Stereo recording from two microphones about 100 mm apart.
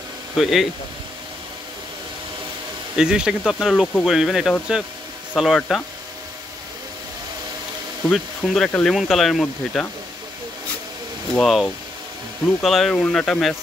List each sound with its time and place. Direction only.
0.4 s speech: centre (ahead or behind)
3.0 s speech: 10° right (ahead or behind)
8.1 s speech: centre (ahead or behind)
8.6 s speech: 15° left (ahead or behind)
8.9 s speech: centre (ahead or behind)
11.3 s speech: 5° left (ahead or behind)